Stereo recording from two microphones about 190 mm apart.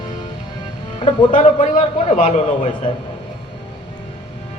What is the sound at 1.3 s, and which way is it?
A man's voice, 40° left (ahead or behind).